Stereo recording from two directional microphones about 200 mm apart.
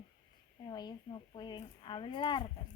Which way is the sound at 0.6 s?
20° left (ahead or behind).